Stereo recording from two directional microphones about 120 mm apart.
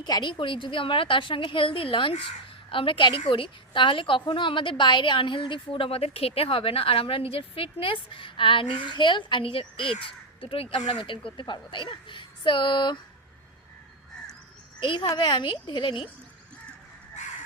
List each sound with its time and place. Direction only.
0.0 s a woman's voice: 40° left (ahead or behind)
14.8 s a woman's voice: 45° left (ahead or behind)